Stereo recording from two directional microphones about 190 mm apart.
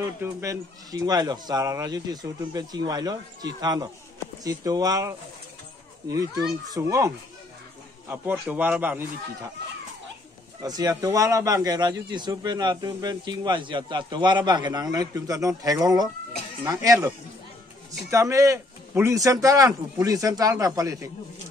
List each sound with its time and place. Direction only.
0.0 s speech: 15° right (ahead or behind)
4.4 s a man's voice: 20° right (ahead or behind)
8.1 s a man's voice: 10° right (ahead or behind)
10.6 s a man's voice: 20° right (ahead or behind)
18.1 s a man's voice: 15° right (ahead or behind)